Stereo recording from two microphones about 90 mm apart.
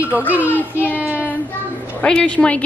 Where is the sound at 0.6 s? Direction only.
20° left (ahead or behind).